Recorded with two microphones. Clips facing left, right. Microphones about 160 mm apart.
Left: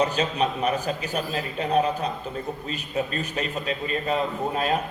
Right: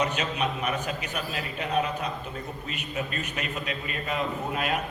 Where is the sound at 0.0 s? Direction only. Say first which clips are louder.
Left 4 dB; 30° left (ahead or behind).